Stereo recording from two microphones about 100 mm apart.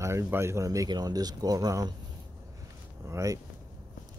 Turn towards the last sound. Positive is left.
turn(degrees=-30)  # may be behind; listen again after turning